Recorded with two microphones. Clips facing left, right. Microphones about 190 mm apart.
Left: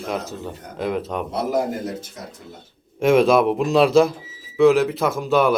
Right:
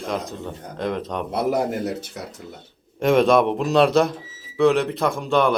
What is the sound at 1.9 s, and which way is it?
Speech, 70° right (ahead or behind).